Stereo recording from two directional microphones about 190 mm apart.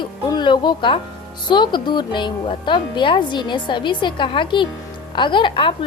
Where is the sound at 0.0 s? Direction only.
25° left (ahead or behind).